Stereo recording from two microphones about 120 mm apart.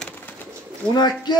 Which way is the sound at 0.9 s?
35° left (ahead or behind).